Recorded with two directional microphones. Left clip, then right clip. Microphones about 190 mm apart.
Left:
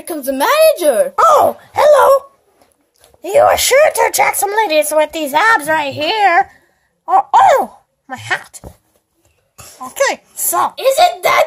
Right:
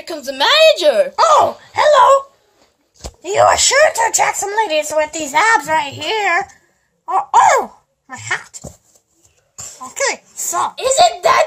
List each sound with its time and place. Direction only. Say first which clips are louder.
0.0 s speech: left 1 dB; 50° left (ahead or behind)
9.8 s speech: left 4 dB; 55° left (ahead or behind)
10.7 s a child's voice: even; 35° left (ahead or behind)